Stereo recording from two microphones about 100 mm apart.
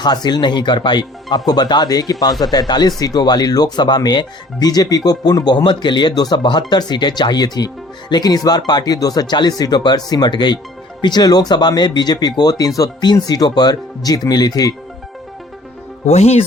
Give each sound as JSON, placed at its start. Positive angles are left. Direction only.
{"t": 0.0, "sound": "speech", "side_deg": 45}
{"t": 16.0, "sound": "speech", "side_deg": 90}